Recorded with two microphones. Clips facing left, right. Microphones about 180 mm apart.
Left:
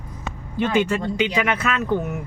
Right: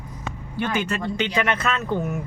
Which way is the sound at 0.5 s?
15° left (ahead or behind).